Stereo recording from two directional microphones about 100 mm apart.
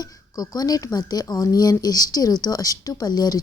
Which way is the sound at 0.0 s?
40° left (ahead or behind).